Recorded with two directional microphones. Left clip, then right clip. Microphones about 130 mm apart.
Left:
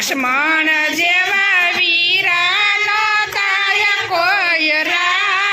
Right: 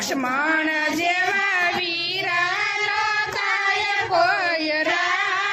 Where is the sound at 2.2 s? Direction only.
15° left (ahead or behind).